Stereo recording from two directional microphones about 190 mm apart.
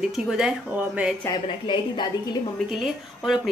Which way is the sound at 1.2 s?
20° left (ahead or behind).